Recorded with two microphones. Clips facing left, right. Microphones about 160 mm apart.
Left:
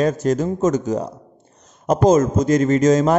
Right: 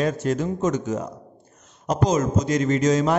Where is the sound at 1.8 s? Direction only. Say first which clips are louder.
Left 7 dB; 50° left (ahead or behind).